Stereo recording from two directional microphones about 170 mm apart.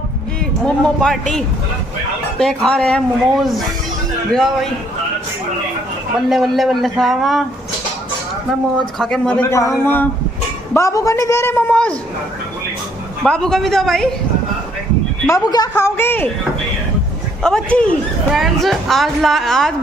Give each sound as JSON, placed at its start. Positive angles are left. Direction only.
{"t": 0.7, "sound": "speech", "side_deg": 5}
{"t": 6.2, "sound": "speech", "side_deg": 0}
{"t": 9.0, "sound": "speech", "side_deg": 5}
{"t": 9.5, "sound": "a man's voice", "side_deg": 15}
{"t": 13.2, "sound": "speech", "side_deg": 5}
{"t": 15.2, "sound": "a man's voice", "side_deg": 20}
{"t": 17.4, "sound": "speech", "side_deg": 5}